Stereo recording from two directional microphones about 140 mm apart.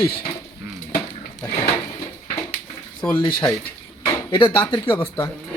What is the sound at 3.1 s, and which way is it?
Speech, 30° left (ahead or behind).